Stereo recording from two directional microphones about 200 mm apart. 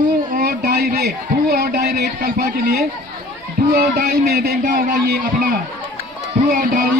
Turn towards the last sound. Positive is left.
turn(degrees=-45)  # may be behind; listen again after turning